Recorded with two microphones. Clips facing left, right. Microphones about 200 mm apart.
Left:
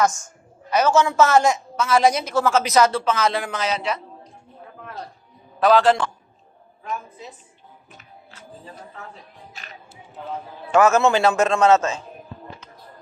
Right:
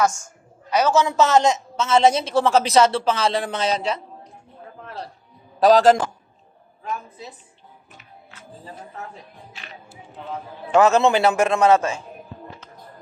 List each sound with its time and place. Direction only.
0.7 s a woman's voice: 15° right (ahead or behind); by 4.0 s 30° right (ahead or behind)
5.5 s a man's voice: 40° right (ahead or behind)
9.5 s music: 40° left (ahead or behind)
10.7 s a man's voice: 15° right (ahead or behind)